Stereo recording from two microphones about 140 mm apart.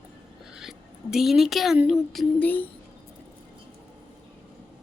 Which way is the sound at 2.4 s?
10° left (ahead or behind).